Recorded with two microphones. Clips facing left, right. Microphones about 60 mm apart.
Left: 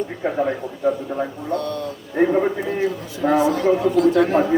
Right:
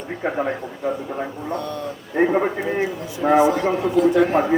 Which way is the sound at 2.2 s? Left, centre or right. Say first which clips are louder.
Left 1 dB; right.